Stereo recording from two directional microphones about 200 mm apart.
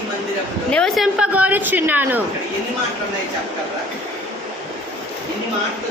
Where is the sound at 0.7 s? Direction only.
Centre (ahead or behind).